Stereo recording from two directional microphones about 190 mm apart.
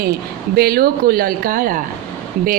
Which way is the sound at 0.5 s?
55° right (ahead or behind).